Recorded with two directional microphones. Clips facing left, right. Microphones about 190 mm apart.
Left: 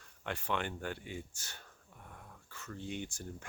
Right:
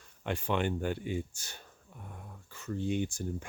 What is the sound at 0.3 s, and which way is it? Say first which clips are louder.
Speech: right 6 dB; 20° right (ahead or behind).